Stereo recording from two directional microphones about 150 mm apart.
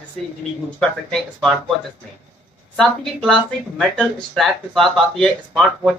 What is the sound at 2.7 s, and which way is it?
Speech, 5° left (ahead or behind).